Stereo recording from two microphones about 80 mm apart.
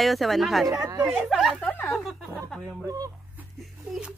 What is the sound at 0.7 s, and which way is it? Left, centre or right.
Speech, right.